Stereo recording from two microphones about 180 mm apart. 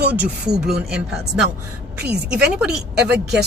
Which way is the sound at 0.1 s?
5° right (ahead or behind).